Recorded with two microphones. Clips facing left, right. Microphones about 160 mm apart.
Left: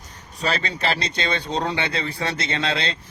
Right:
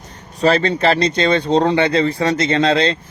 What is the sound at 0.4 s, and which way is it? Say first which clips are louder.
Speech: right 10 dB; 45° right (ahead or behind).